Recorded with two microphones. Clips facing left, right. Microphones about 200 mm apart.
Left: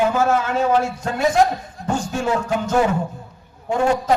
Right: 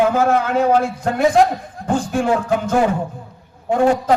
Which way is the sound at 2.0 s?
55° right (ahead or behind).